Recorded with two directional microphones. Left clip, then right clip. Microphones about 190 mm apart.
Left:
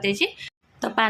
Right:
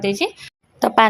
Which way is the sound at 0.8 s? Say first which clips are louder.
Right 8 dB; 30° right (ahead or behind).